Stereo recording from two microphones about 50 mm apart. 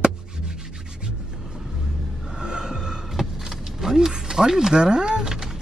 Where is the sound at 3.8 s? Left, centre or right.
Centre.